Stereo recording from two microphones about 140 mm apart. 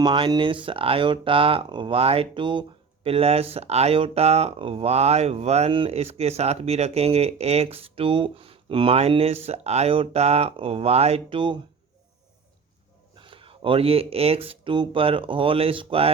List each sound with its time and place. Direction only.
0.0 s speech: 35° right (ahead or behind)
13.1 s speech: 40° right (ahead or behind)